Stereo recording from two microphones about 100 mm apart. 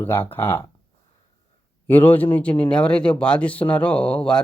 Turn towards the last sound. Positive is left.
turn(degrees=10)  # may be behind; listen again after turning